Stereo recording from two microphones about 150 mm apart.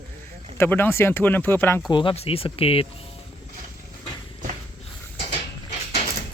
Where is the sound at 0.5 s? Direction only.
15° left (ahead or behind).